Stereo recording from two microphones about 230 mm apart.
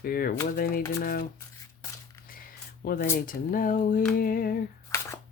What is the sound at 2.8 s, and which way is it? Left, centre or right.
Speech, left.